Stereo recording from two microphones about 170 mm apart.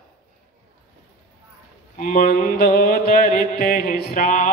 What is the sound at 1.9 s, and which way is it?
Mantra, 55° left (ahead or behind).